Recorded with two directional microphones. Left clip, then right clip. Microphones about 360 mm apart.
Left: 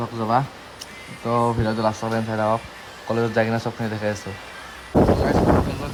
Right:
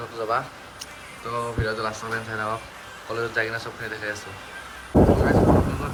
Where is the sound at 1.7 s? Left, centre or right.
Centre.